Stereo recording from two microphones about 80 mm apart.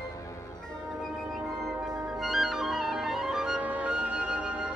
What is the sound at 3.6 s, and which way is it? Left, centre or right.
Flute, centre.